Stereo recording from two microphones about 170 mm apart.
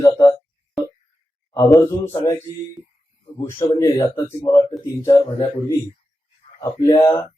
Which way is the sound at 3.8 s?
20° left (ahead or behind).